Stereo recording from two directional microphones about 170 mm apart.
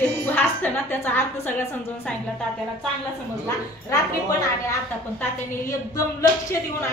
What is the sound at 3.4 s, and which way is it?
A woman's voice, 20° left (ahead or behind).